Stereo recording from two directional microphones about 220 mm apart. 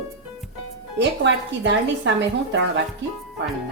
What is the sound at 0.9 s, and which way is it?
Speech, 55° right (ahead or behind).